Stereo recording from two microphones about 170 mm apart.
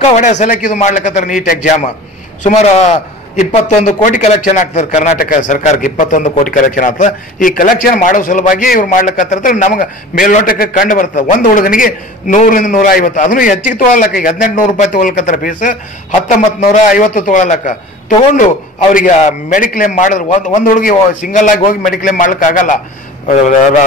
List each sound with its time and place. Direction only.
0.0 s a man's voice: 45° left (ahead or behind)
5.1 s a man's voice: 55° left (ahead or behind)